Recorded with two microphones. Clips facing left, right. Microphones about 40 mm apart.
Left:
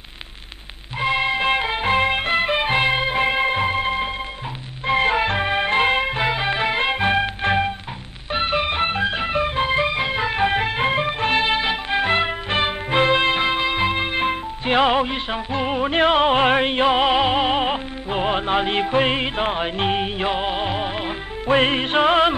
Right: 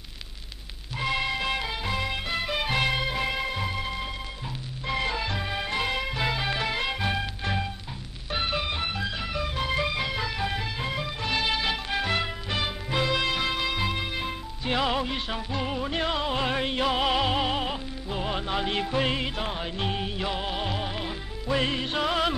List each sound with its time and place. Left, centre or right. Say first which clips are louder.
0.9 s music: left 7 dB; left